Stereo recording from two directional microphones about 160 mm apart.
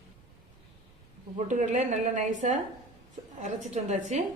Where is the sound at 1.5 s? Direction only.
50° right (ahead or behind).